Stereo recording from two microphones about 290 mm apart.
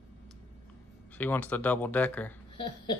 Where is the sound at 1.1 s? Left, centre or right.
Centre.